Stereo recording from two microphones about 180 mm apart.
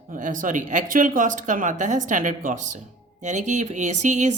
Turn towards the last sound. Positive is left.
turn(degrees=-40)  # may be behind; listen again after turning